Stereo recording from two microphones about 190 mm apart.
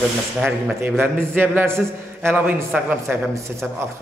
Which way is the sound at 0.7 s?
10° right (ahead or behind).